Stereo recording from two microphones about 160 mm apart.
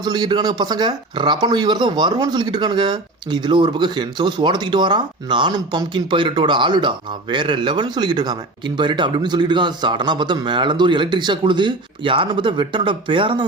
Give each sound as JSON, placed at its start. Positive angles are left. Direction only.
{"t": 0.0, "sound": "speech", "side_deg": -25}